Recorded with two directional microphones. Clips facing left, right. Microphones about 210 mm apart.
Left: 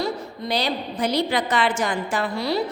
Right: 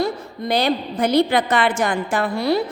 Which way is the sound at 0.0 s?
55° right (ahead or behind).